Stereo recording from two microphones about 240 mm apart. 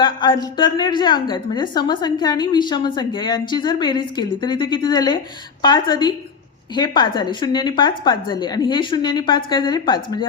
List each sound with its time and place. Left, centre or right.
0.0 s a woman's voice: centre